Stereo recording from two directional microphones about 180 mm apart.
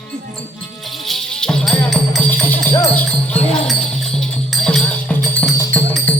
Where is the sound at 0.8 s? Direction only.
Centre (ahead or behind).